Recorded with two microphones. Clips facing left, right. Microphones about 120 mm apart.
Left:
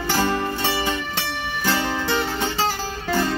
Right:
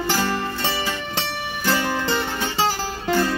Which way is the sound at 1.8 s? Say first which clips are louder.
Even; 15° left (ahead or behind).